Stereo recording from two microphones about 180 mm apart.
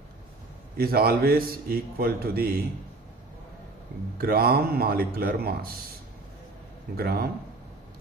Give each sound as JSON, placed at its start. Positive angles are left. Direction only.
{"t": 0.7, "sound": "a man's voice", "side_deg": -55}
{"t": 4.2, "sound": "a man's voice", "side_deg": -55}
{"t": 7.0, "sound": "a man's voice", "side_deg": -60}